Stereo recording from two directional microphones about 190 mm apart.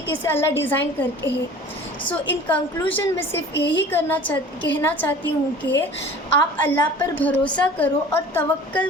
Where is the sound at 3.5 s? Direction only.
65° left (ahead or behind).